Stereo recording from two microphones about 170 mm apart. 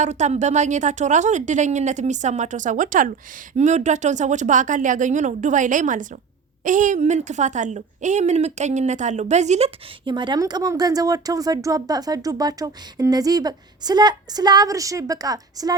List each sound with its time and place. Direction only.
0.0 s a woman's voice: 45° right (ahead or behind); by 15.8 s 20° right (ahead or behind)